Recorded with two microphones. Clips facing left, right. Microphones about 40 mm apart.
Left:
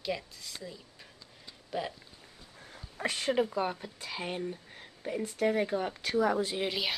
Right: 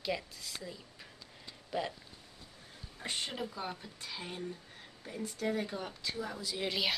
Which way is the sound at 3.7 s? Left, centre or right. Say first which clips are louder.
Left 4 dB; left.